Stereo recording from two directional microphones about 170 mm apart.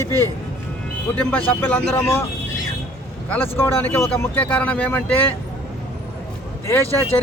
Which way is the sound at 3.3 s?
10° left (ahead or behind).